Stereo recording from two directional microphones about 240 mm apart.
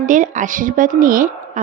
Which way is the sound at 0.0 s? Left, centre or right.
Right.